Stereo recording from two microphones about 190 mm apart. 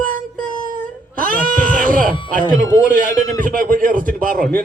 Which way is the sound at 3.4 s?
45° right (ahead or behind).